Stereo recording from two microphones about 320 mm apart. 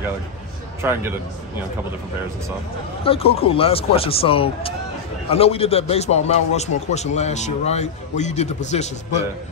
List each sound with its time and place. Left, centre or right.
0.8 s speech: centre
3.0 s a man's voice: centre